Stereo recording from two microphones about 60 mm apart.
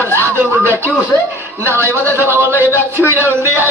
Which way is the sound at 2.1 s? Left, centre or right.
Right.